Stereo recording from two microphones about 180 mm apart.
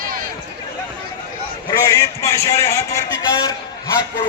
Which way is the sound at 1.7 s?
20° left (ahead or behind).